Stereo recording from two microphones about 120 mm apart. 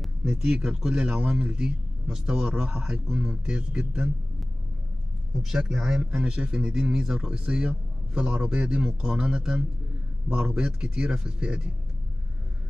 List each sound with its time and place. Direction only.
0.0 s a man's voice: 5° right (ahead or behind)
5.4 s a man's voice: 5° right (ahead or behind)